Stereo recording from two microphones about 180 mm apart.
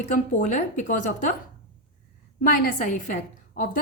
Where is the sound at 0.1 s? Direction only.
40° left (ahead or behind).